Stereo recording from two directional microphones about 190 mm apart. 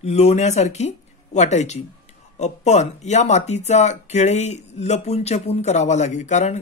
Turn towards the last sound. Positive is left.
turn(degrees=35)  # may be behind; listen again after turning